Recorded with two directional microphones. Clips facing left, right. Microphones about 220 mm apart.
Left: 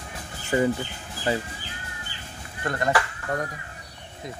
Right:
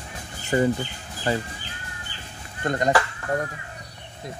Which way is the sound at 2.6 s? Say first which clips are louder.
Right 3 dB; 20° right (ahead or behind).